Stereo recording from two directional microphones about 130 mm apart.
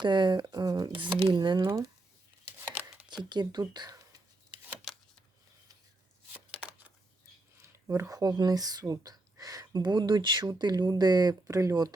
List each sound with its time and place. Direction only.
0.0 s speech: 35° right (ahead or behind)
1.6 s speech: 25° right (ahead or behind)
2.6 s chopping: 15° right (ahead or behind)
3.2 s speech: 35° right (ahead or behind)
7.5 s speech: 20° right (ahead or behind)